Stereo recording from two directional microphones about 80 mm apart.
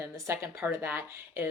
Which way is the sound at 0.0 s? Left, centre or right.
Right.